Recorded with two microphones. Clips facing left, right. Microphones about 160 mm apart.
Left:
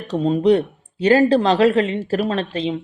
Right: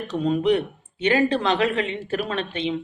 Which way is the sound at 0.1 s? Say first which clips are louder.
Left 5 dB; 35° left (ahead or behind).